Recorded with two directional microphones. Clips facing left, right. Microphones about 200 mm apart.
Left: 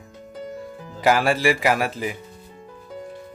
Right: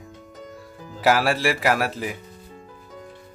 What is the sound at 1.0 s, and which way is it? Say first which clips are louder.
A man's voice: left 1 dB; centre (ahead or behind).